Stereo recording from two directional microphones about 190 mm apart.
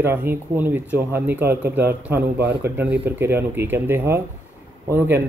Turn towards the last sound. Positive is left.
turn(degrees=-10)  # may be behind; listen again after turning